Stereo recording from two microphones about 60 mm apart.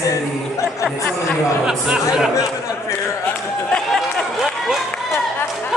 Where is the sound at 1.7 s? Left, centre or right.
Centre.